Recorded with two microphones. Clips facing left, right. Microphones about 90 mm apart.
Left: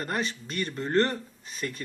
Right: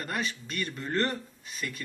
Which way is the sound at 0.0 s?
35° left (ahead or behind).